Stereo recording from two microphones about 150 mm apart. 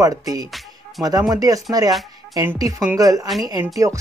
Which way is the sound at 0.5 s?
Centre (ahead or behind).